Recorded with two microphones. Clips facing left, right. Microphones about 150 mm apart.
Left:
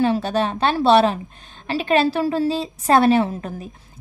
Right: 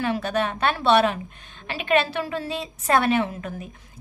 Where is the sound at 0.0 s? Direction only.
30° left (ahead or behind).